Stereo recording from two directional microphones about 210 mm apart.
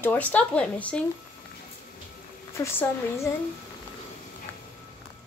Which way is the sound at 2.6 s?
15° left (ahead or behind).